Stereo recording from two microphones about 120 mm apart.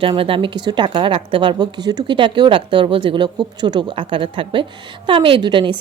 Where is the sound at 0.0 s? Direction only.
50° right (ahead or behind).